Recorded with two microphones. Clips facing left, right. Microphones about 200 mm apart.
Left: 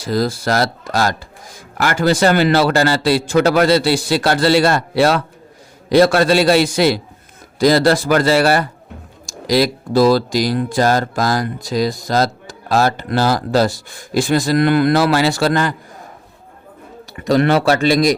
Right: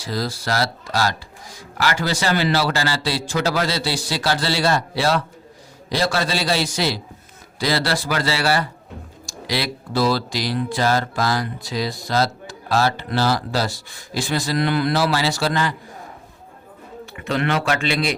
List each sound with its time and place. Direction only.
0.0 s a man's voice: 50° left (ahead or behind)
17.2 s speech: 40° left (ahead or behind)